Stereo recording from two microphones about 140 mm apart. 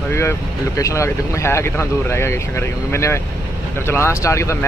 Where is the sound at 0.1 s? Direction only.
20° left (ahead or behind).